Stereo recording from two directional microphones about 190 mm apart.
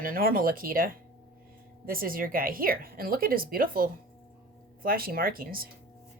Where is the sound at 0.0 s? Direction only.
50° right (ahead or behind).